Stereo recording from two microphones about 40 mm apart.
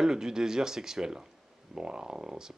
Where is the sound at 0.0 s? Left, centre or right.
Centre.